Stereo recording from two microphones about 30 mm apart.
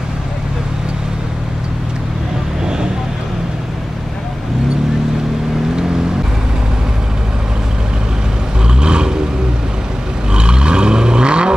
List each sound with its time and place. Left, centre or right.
8.6 s vehicle: right
10.3 s vehicle: right